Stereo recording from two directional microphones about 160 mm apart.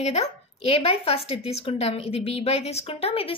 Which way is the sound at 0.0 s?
45° left (ahead or behind).